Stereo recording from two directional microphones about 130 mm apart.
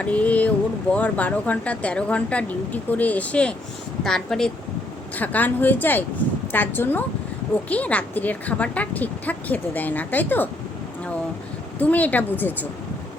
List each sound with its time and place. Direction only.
0.0 s a sound: 10° left (ahead or behind)
0.9 s a woman's voice: 10° left (ahead or behind)
11.8 s a woman's voice: 10° left (ahead or behind)